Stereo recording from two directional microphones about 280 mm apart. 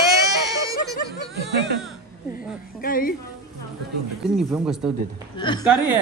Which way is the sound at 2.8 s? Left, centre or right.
Left.